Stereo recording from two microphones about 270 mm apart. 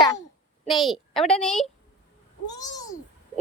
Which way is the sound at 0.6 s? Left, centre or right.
Centre.